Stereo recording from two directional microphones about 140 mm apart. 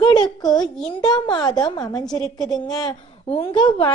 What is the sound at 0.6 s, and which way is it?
Speech, 5° left (ahead or behind).